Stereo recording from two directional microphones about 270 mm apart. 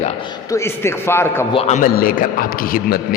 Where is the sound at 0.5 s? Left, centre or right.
Centre.